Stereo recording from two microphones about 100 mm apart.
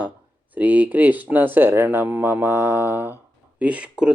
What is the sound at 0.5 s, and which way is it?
Speech, 15° right (ahead or behind).